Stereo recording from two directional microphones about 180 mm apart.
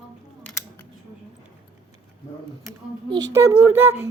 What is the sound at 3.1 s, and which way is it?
Speech, 20° right (ahead or behind).